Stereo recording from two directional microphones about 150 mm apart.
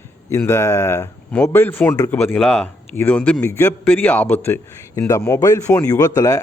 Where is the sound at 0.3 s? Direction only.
15° left (ahead or behind).